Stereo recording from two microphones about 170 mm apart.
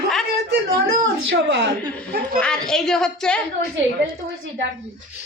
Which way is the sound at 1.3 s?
90° right.